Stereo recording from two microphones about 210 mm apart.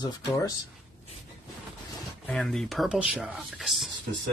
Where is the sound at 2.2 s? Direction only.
Centre (ahead or behind).